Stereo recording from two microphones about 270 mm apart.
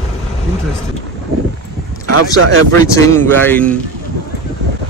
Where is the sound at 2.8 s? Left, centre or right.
Centre.